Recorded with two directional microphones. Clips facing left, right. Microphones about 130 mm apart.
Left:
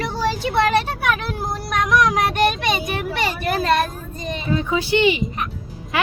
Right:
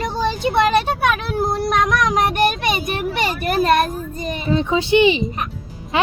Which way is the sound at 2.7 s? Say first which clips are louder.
Right 1 dB; 15° right (ahead or behind).